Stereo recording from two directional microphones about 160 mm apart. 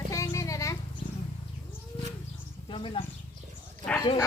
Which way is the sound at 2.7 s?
30° left (ahead or behind).